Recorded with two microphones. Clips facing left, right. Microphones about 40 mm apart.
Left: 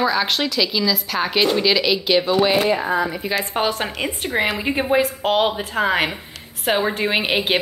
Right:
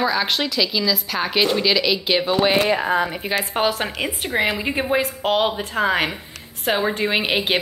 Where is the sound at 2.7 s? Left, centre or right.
Right.